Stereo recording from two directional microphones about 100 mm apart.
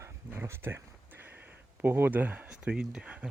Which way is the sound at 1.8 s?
20° right (ahead or behind).